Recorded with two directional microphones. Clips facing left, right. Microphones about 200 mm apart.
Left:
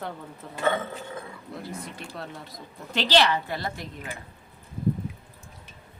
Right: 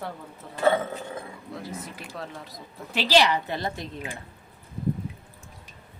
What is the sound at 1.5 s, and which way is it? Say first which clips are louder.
A woman's voice: even; centre (ahead or behind).